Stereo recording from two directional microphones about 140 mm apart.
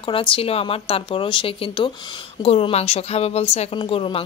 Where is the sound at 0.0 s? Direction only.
40° left (ahead or behind).